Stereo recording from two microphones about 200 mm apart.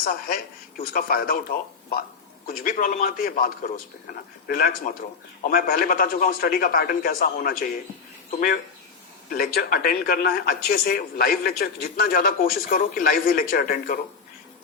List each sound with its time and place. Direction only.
0.0 s a man's voice: 45° left (ahead or behind)